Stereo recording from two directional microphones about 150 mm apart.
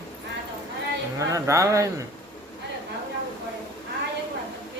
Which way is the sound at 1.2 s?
20° right (ahead or behind).